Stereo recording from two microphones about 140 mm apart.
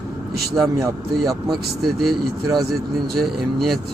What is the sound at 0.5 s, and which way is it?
Speech, 25° right (ahead or behind).